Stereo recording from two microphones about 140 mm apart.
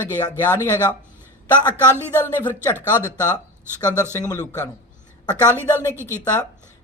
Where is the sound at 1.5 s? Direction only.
15° right (ahead or behind).